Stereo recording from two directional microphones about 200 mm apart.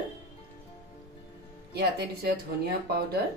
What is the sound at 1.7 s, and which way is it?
Speech, 55° right (ahead or behind).